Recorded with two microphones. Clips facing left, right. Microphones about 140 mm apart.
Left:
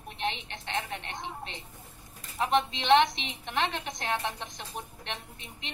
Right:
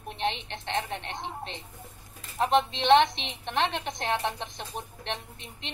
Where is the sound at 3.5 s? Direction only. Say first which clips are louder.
Right 3 dB; 20° right (ahead or behind).